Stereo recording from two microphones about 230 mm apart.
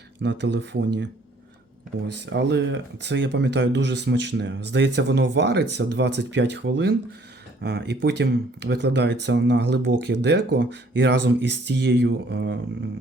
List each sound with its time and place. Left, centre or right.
0.2 s speech: right
2.2 s speech: right